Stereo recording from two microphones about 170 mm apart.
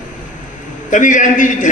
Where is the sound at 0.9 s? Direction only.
50° left (ahead or behind).